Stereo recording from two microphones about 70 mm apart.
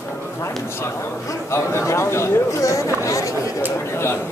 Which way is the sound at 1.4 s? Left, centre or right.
Left.